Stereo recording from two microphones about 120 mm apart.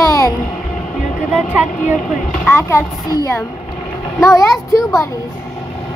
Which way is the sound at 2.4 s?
20° left (ahead or behind).